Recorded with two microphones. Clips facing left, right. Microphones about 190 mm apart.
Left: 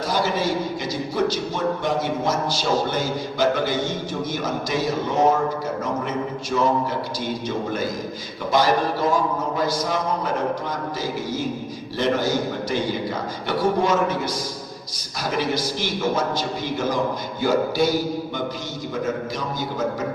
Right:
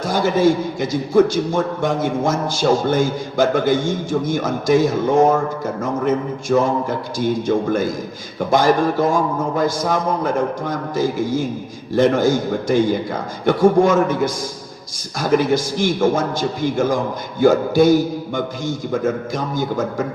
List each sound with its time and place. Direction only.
0.0 s a man's voice: 50° right (ahead or behind)
6.5 s a man's voice: 50° right (ahead or behind)